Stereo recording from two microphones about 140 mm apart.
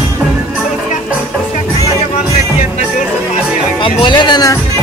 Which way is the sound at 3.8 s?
35° left (ahead or behind).